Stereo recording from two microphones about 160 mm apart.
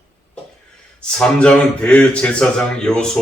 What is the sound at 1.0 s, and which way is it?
Speech, 5° left (ahead or behind).